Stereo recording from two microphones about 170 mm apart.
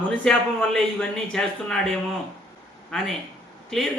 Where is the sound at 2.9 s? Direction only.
5° left (ahead or behind).